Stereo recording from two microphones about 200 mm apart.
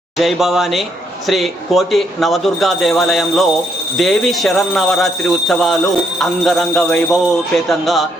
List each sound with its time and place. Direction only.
0.2 s speech: centre (ahead or behind)